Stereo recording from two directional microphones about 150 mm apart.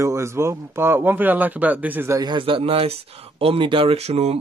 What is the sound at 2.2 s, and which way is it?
Speech, 35° right (ahead or behind).